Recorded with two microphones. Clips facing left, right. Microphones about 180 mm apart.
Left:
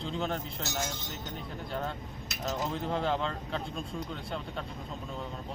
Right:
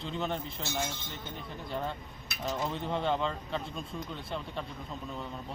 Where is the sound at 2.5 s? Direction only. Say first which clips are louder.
Left 1 dB; centre (ahead or behind).